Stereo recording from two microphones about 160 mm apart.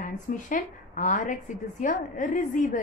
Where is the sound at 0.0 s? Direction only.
55° left (ahead or behind).